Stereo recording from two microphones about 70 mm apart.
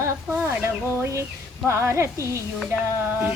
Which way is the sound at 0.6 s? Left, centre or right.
Right.